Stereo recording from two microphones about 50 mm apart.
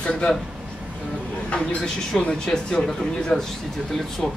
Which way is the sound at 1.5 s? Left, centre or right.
Left.